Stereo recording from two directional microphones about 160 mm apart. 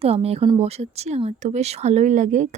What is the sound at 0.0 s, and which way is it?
Speech, 40° right (ahead or behind).